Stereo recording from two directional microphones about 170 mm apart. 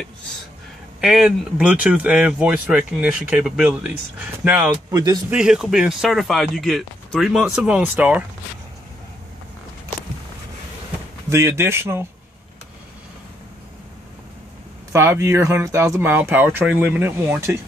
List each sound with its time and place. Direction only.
1.0 s speech: 5° right (ahead or behind)
4.9 s a man's voice: 20° right (ahead or behind)
5.3 s speech: 5° right (ahead or behind)
11.2 s speech: 15° right (ahead or behind)
14.9 s speech: 15° right (ahead or behind)